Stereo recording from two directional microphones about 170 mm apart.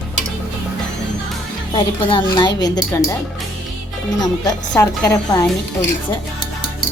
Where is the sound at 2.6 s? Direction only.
20° left (ahead or behind).